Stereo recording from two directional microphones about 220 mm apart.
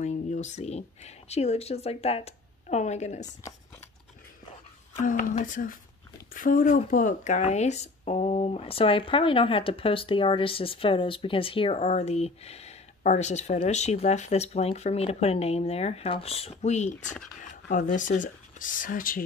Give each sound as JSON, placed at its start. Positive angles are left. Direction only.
{"t": 0.0, "sound": "speech", "side_deg": 30}
{"t": 5.0, "sound": "speech", "side_deg": 35}